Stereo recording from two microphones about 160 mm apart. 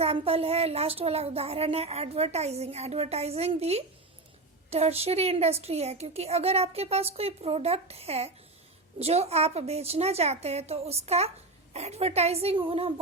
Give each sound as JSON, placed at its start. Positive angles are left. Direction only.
{"t": 0.0, "sound": "speech", "side_deg": -40}